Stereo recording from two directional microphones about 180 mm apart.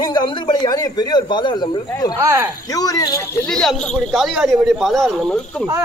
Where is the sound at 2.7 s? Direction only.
20° left (ahead or behind).